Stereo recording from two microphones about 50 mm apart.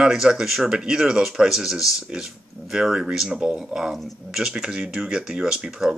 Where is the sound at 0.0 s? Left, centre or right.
Centre.